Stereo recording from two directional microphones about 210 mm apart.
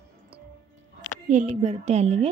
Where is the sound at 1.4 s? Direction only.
30° right (ahead or behind).